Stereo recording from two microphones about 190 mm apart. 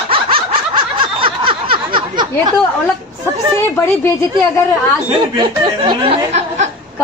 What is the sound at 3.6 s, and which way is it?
Speech, 15° left (ahead or behind).